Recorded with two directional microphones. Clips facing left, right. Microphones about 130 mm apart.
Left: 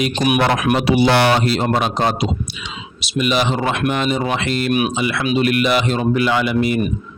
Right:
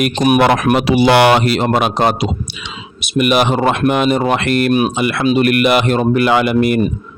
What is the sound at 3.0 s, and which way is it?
Speech, 55° right (ahead or behind).